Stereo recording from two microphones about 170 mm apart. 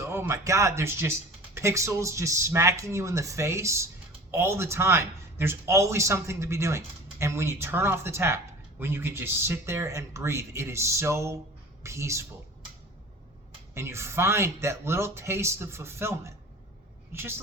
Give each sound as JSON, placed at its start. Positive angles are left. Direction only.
{"t": 0.0, "sound": "speech", "side_deg": -15}
{"t": 13.7, "sound": "speech", "side_deg": -15}